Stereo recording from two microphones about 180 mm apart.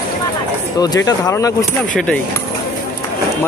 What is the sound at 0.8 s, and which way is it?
Speech, 20° left (ahead or behind).